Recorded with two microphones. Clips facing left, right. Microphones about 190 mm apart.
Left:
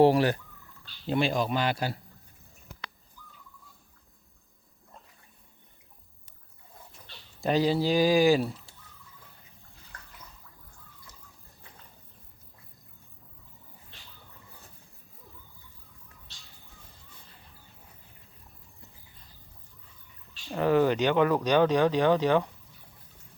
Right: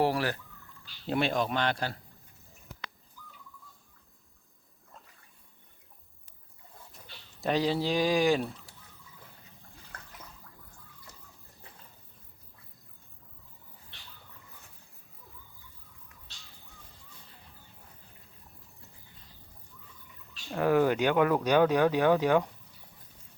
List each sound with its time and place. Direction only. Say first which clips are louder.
0.0 s speech: left 7 dB; 20° left (ahead or behind)
1.0 s speech: left 2 dB; centre (ahead or behind)
7.4 s speech: left 3 dB; centre (ahead or behind)
20.6 s speech: left 1 dB; 10° right (ahead or behind)